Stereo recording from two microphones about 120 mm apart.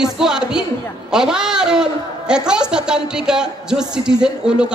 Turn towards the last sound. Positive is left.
turn(degrees=-5)  # may be behind; listen again after turning